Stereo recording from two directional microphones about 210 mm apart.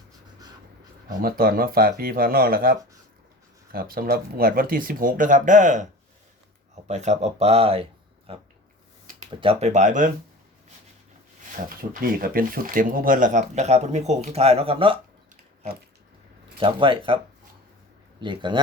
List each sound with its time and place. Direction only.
1.0 s speech: 45° right (ahead or behind)
11.8 s speech: 45° right (ahead or behind); by 14.9 s 25° right (ahead or behind)
16.6 s speech: 25° right (ahead or behind)
18.2 s speech: 20° right (ahead or behind)